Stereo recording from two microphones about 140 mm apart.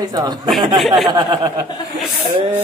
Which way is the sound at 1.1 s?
30° right (ahead or behind).